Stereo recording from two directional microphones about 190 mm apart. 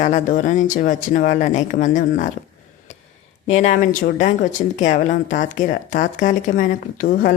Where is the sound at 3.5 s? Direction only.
40° left (ahead or behind).